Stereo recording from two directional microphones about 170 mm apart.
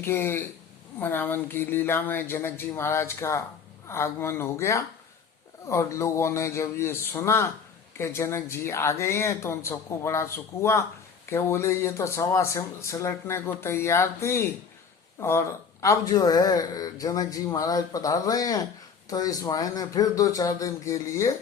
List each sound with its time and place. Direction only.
0.0 s speech: 15° left (ahead or behind)